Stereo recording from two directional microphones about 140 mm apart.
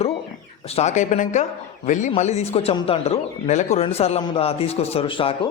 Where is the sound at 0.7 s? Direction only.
55° left (ahead or behind).